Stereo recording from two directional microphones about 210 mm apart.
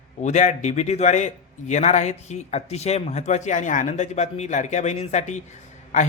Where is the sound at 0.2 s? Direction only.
35° left (ahead or behind).